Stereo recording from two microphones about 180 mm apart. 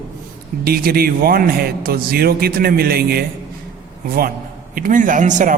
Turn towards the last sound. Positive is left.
turn(degrees=-45)  # may be behind; listen again after turning